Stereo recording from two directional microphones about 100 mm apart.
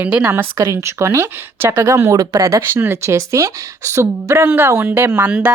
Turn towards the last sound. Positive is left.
turn(degrees=-10)  # may be behind; listen again after turning